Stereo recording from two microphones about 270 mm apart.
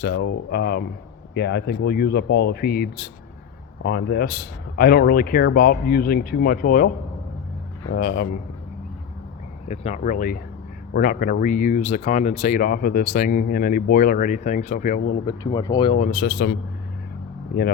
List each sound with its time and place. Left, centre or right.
0.0 s speech: left
7.9 s speech: left
9.6 s speech: left
15.3 s speech: centre; by 17.7 s left